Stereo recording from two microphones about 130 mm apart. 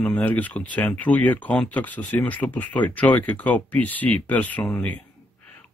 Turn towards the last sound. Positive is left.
turn(degrees=10)  # may be behind; listen again after turning